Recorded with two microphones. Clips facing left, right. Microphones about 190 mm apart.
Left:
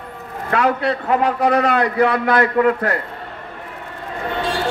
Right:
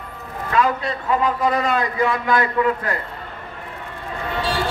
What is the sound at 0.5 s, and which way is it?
A man's voice, 65° left (ahead or behind).